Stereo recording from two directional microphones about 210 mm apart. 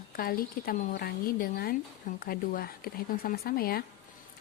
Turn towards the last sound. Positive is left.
turn(degrees=45)  # may be behind; listen again after turning